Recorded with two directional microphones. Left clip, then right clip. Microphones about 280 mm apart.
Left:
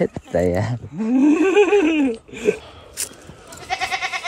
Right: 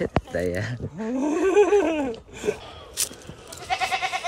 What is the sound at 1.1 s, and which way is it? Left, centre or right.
Laughter, centre.